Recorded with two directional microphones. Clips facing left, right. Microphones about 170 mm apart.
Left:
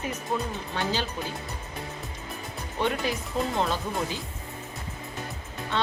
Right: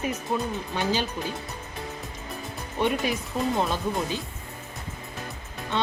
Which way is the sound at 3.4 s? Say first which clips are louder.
Right 1 dB; 10° right (ahead or behind).